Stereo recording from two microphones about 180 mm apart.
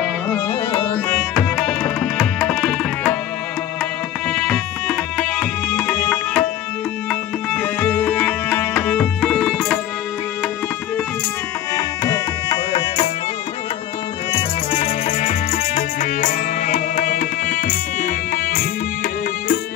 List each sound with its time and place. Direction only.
0.9 s tabla: 5° left (ahead or behind)
4.3 s tabla: 5° left (ahead or behind)
7.1 s music: 10° left (ahead or behind)
11.7 s music: 20° left (ahead or behind)
14.3 s music: 35° left (ahead or behind); by 18.7 s 50° left (ahead or behind)